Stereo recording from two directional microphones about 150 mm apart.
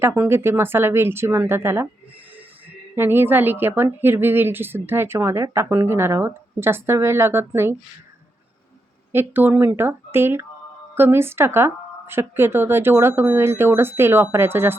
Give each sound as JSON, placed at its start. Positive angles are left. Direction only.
{"t": 0.0, "sound": "a woman's voice", "side_deg": -15}
{"t": 2.9, "sound": "a woman's voice", "side_deg": -15}
{"t": 9.1, "sound": "a woman's voice", "side_deg": -15}